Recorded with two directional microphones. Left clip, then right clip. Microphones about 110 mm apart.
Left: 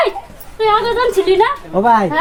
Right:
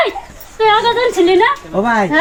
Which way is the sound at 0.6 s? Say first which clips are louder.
Right 2 dB; 40° left (ahead or behind).